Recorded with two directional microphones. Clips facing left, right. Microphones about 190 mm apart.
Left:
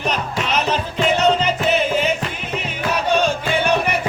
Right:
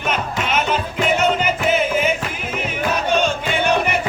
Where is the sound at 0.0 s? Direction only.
35° left (ahead or behind).